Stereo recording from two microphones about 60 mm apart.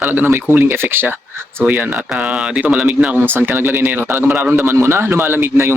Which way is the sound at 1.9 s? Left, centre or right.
Centre.